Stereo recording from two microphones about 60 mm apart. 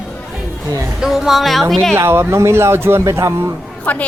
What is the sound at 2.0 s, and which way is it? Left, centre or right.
Speech, right.